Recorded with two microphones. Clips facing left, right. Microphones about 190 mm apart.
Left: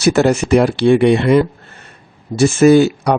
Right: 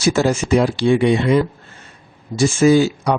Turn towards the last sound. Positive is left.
turn(degrees=60)  # may be behind; listen again after turning